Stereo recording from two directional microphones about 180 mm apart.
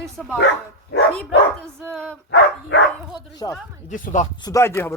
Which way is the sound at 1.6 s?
5° left (ahead or behind).